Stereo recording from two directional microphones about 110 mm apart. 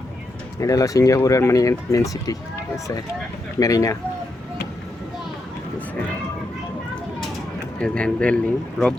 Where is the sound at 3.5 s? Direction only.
30° left (ahead or behind).